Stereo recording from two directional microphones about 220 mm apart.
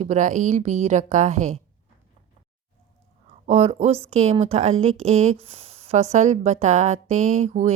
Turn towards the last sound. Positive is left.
turn(degrees=-30)  # may be behind; listen again after turning